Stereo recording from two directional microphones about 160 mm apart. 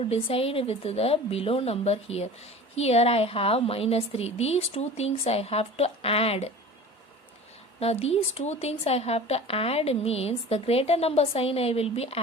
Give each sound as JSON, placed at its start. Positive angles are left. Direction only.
{"t": 0.0, "sound": "a woman's voice", "side_deg": 35}
{"t": 7.8, "sound": "a woman's voice", "side_deg": 40}